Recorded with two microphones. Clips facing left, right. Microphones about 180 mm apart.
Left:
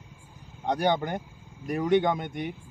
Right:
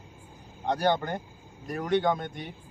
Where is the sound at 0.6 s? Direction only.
15° left (ahead or behind).